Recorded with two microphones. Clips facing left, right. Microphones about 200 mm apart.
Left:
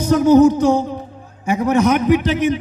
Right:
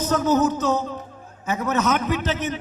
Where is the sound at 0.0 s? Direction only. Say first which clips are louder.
Left 9 dB; 10° left (ahead or behind).